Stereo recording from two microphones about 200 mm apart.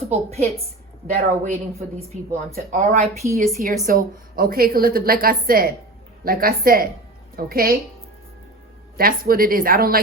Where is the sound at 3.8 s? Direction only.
45° right (ahead or behind).